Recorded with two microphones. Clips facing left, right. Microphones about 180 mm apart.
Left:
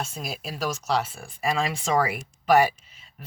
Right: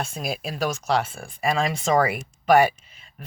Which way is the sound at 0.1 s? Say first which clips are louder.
Right 5 dB; centre (ahead or behind).